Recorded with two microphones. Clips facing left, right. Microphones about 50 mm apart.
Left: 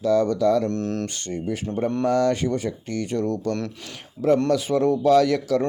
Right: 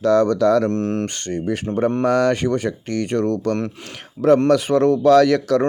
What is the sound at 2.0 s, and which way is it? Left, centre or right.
Speech, right.